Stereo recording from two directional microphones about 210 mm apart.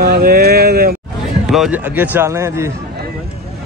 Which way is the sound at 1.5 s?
Centre (ahead or behind).